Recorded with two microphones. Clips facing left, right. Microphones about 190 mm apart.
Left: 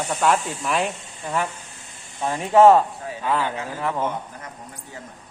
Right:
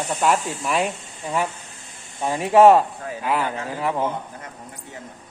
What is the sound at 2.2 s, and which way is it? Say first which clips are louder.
Speech: right 1 dB; 15° right (ahead or behind).